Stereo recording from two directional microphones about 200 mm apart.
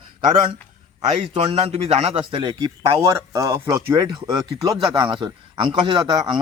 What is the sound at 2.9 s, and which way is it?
A man's voice, 15° right (ahead or behind).